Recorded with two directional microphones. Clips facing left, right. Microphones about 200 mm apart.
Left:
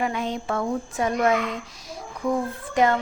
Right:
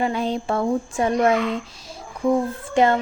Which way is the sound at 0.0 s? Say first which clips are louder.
Right 4 dB; 30° right (ahead or behind).